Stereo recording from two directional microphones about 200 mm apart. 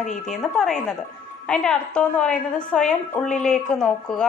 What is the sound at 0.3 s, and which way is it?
A woman's voice, centre (ahead or behind).